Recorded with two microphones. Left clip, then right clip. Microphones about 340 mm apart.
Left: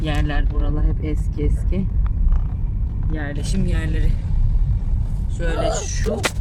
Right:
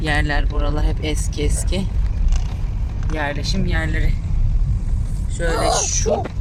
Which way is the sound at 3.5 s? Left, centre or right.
Centre.